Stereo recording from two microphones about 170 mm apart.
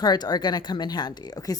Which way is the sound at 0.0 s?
25° left (ahead or behind).